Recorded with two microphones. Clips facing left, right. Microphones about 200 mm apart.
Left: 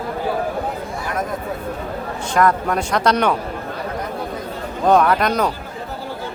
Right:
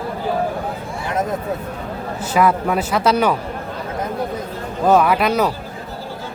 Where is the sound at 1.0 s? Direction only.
20° right (ahead or behind).